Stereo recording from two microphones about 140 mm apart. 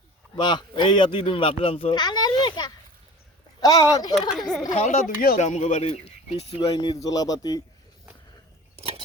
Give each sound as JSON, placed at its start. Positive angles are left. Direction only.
{"t": 0.3, "sound": "speech", "side_deg": 35}
{"t": 4.3, "sound": "speech", "side_deg": 0}
{"t": 4.7, "sound": "speech", "side_deg": 50}
{"t": 4.9, "sound": "speech", "side_deg": 80}
{"t": 5.4, "sound": "speech", "side_deg": 55}
{"t": 6.7, "sound": "speech", "side_deg": 25}